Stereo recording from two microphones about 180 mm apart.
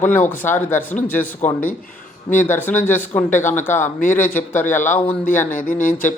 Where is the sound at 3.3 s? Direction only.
45° left (ahead or behind).